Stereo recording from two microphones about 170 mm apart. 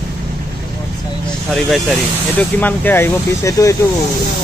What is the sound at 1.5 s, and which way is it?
Speech, centre (ahead or behind).